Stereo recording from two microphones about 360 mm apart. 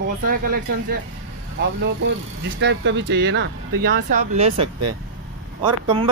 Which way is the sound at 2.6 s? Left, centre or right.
Right.